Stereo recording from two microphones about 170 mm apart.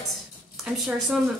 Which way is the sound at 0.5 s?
Centre (ahead or behind).